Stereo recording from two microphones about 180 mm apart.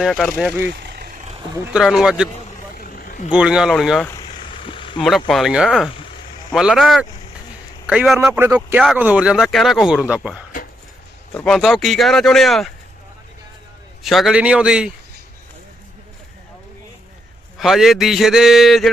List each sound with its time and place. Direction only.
0.0 s a man's voice: centre (ahead or behind)
0.7 s vehicle: 60° right (ahead or behind)
1.5 s a man's voice: 10° right (ahead or behind)
2.7 s vehicle: 55° left (ahead or behind)
3.3 s a man's voice: 5° right (ahead or behind)
4.2 s vehicle: 25° left (ahead or behind)
4.9 s a man's voice: centre (ahead or behind)
8.2 s a man's voice: 15° right (ahead or behind)
11.4 s a man's voice: centre (ahead or behind)
14.0 s a man's voice: centre (ahead or behind)
17.6 s a man's voice: centre (ahead or behind)